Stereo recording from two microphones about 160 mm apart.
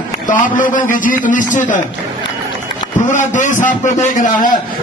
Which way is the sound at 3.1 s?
50° left (ahead or behind).